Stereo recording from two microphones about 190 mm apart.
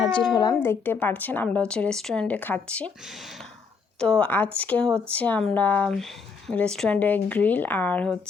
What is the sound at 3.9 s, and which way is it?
Speech, 5° left (ahead or behind).